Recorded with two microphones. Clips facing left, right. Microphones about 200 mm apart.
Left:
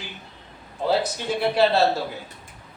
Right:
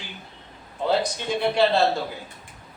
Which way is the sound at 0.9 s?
5° left (ahead or behind).